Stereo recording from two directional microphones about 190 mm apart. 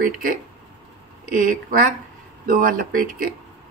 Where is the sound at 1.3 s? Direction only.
45° right (ahead or behind).